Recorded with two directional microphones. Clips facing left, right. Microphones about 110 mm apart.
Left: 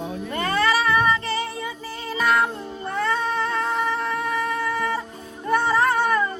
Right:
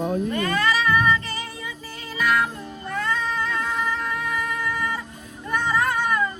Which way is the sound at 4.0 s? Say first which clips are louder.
Left 3 dB; 35° left (ahead or behind).